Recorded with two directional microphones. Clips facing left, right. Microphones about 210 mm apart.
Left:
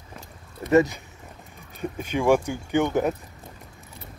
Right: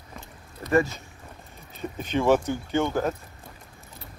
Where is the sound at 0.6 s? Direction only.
20° left (ahead or behind).